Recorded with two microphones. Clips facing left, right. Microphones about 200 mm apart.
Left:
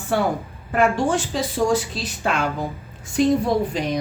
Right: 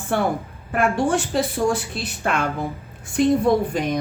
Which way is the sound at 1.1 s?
55° right (ahead or behind).